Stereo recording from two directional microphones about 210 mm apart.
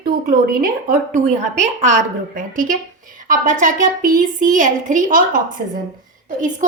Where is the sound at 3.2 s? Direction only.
40° right (ahead or behind).